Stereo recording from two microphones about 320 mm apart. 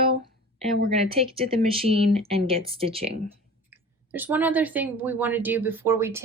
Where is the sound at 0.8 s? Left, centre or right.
Centre.